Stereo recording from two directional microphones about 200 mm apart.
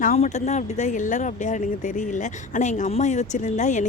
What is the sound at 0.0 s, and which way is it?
A woman's voice, 40° left (ahead or behind).